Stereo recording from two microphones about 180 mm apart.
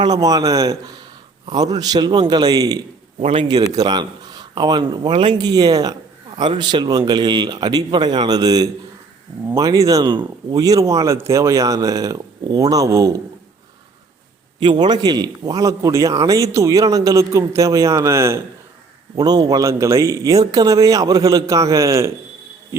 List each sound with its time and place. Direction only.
0.0 s a man's voice: 20° right (ahead or behind)
3.2 s a man's voice: 30° right (ahead or behind)
14.6 s a man's voice: 25° right (ahead or behind)